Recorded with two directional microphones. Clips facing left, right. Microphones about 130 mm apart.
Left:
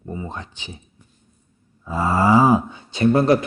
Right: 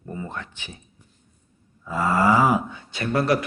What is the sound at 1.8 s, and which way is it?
A man's voice, 25° left (ahead or behind).